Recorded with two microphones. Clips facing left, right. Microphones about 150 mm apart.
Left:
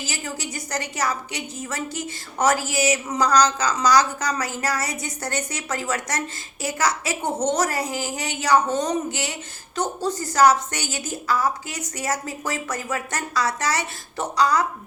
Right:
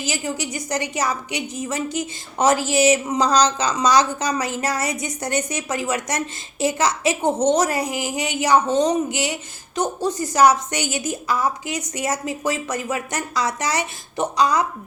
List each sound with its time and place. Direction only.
0.0 s a woman's voice: 15° right (ahead or behind)